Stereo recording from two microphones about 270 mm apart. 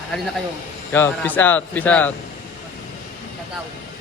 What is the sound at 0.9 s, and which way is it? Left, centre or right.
Speech, centre.